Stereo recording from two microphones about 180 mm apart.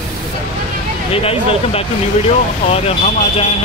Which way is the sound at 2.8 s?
35° left (ahead or behind).